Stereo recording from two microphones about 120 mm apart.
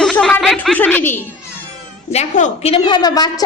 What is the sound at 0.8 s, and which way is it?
Speech, 15° left (ahead or behind).